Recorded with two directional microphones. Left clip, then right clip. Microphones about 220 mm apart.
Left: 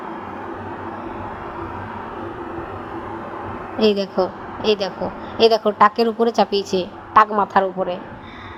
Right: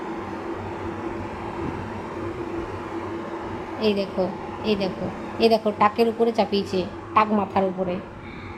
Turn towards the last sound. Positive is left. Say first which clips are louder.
# left 5 dB
turn(degrees=25)  # may be behind; listen again after turning